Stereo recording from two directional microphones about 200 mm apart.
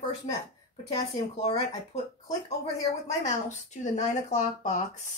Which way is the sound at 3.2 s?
35° left (ahead or behind).